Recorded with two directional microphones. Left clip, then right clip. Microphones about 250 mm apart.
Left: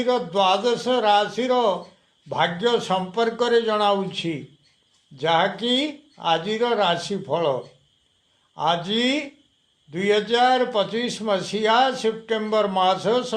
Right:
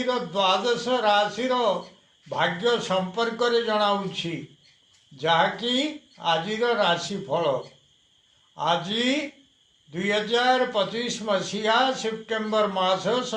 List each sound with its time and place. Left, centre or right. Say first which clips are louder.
0.0 s a man's voice: left 4 dB; left
8.5 s a man's voice: left 2 dB; left